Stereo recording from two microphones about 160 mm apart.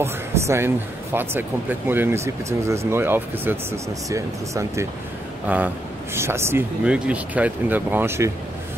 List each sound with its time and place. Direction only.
0.0 s speech: 15° right (ahead or behind)